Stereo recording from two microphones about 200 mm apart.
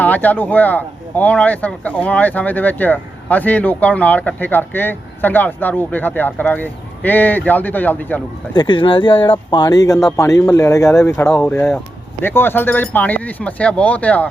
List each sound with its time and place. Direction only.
0.0 s speech: 10° left (ahead or behind)
8.5 s speech: 25° left (ahead or behind); by 14.3 s 5° left (ahead or behind)